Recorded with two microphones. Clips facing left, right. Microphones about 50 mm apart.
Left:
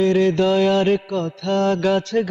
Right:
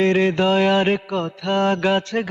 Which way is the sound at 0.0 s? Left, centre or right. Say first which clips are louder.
Left 1 dB; right.